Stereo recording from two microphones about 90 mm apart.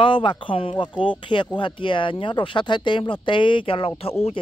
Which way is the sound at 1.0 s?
65° left (ahead or behind).